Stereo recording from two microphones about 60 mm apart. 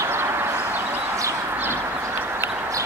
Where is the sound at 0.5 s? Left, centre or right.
Right.